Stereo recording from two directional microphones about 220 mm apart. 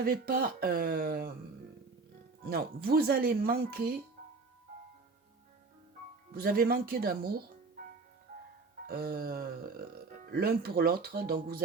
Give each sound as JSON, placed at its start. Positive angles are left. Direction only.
{"t": 0.0, "sound": "speech", "side_deg": -45}
{"t": 2.4, "sound": "speech", "side_deg": -45}
{"t": 6.3, "sound": "speech", "side_deg": -45}
{"t": 8.9, "sound": "speech", "side_deg": -45}